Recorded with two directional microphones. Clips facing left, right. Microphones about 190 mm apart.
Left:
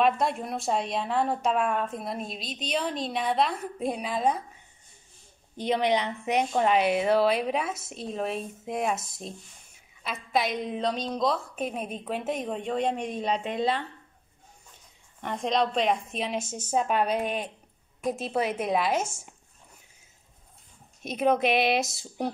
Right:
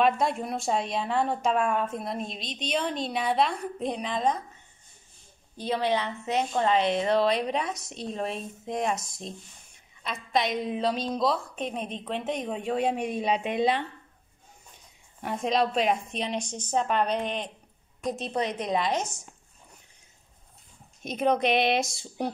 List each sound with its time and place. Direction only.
0.0 s a woman's voice: centre (ahead or behind)
5.6 s a woman's voice: 20° left (ahead or behind); by 13.8 s 15° right (ahead or behind)
15.2 s a woman's voice: 5° right (ahead or behind)
19.0 s speech: 25° left (ahead or behind)
21.0 s a woman's voice: centre (ahead or behind)